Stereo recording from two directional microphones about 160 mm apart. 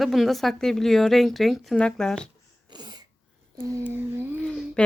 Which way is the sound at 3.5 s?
15° right (ahead or behind).